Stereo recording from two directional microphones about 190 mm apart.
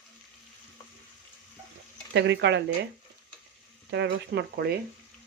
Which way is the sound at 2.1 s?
65° right (ahead or behind).